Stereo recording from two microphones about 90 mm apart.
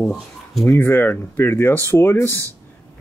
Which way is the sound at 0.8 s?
25° left (ahead or behind).